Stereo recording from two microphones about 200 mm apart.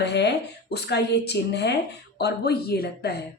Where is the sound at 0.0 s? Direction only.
60° left (ahead or behind).